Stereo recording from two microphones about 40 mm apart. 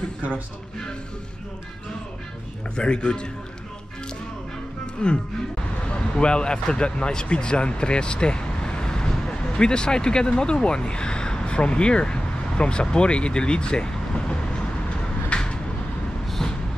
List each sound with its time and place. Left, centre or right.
2.7 s a man's voice: left
5.0 s a man's voice: left
15.2 s vehicle: left